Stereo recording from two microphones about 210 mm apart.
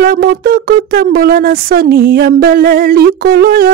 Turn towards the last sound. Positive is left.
turn(degrees=-45)  # may be behind; listen again after turning